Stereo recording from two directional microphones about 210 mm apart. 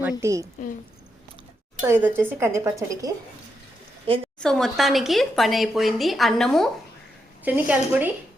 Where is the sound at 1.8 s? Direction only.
10° right (ahead or behind).